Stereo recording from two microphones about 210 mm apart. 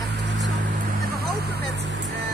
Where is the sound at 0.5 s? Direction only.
45° right (ahead or behind).